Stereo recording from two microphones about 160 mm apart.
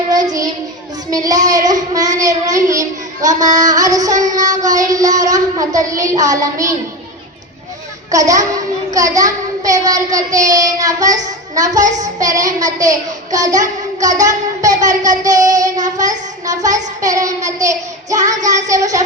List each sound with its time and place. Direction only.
0.1 s child singing: 25° right (ahead or behind)
1.1 s a child's voice: 20° right (ahead or behind)
8.1 s a child's voice: 20° right (ahead or behind)